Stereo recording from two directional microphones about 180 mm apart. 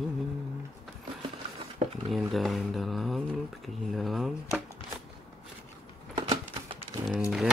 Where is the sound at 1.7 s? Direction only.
30° right (ahead or behind).